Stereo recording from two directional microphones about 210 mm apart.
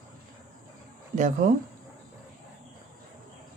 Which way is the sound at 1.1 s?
35° right (ahead or behind).